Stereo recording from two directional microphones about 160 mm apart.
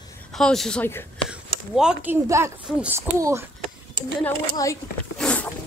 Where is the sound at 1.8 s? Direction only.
5° right (ahead or behind).